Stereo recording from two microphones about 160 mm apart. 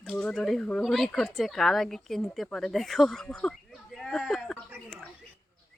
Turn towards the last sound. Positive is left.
turn(degrees=0)  # may be behind; listen again after turning